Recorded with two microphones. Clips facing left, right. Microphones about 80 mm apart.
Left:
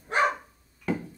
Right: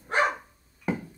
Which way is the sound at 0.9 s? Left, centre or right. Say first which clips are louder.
Even; centre.